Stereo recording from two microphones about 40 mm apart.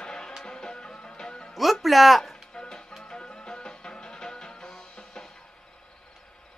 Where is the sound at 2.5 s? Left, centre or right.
Left.